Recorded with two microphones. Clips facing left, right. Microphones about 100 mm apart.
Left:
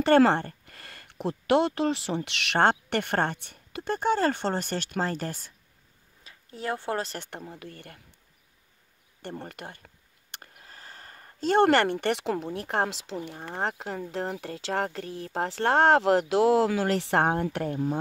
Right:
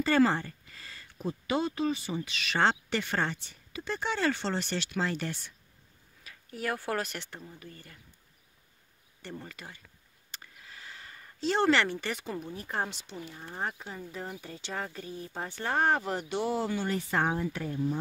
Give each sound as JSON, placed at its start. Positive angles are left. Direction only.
{"t": 0.0, "sound": "speech", "side_deg": 65}
{"t": 6.2, "sound": "speech", "side_deg": 25}
{"t": 7.2, "sound": "speech", "side_deg": 60}
{"t": 9.2, "sound": "speech", "side_deg": 55}